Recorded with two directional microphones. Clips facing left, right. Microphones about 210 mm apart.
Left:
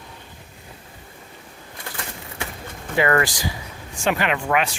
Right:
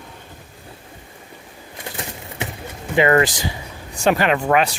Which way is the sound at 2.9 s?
20° right (ahead or behind).